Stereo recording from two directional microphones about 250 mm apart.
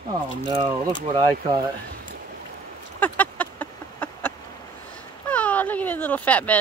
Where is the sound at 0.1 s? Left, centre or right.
Centre.